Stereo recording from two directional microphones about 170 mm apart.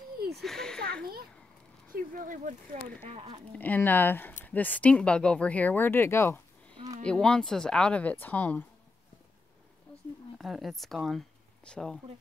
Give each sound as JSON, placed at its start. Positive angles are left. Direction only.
{"t": 0.4, "sound": "a sound", "side_deg": 5}
{"t": 1.9, "sound": "speech", "side_deg": -55}
{"t": 3.5, "sound": "speech", "side_deg": 10}
{"t": 10.3, "sound": "speech", "side_deg": 0}